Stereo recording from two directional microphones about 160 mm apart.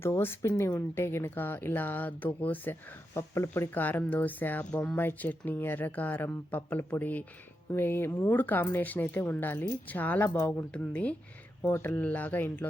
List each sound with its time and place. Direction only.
0.0 s speech: 15° left (ahead or behind)